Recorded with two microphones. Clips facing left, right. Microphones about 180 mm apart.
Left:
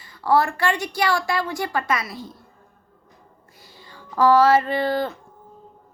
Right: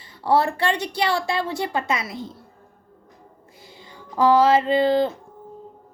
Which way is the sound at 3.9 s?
20° right (ahead or behind).